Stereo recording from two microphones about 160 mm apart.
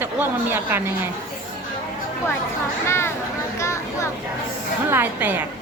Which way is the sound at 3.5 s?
20° left (ahead or behind).